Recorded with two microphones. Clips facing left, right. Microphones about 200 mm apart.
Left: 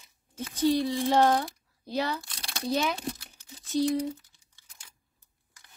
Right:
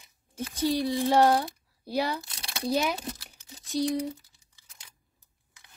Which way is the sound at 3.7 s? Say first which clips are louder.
Left 2 dB; 10° right (ahead or behind).